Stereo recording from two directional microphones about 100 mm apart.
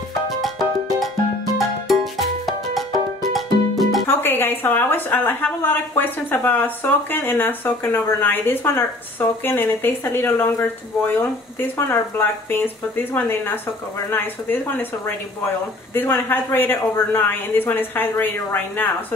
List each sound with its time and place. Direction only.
0.4 s music: centre (ahead or behind)
4.2 s a woman's voice: 20° left (ahead or behind)